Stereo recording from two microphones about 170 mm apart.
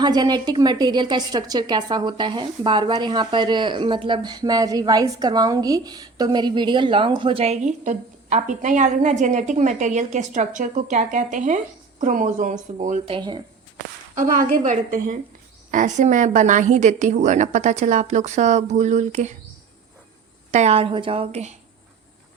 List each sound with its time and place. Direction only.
0.0 s a woman's voice: 25° right (ahead or behind); by 13.0 s 45° right (ahead or behind)
13.1 s a woman's voice: 30° right (ahead or behind)
14.2 s a woman's voice: 50° right (ahead or behind)
20.5 s a woman's voice: 40° right (ahead or behind)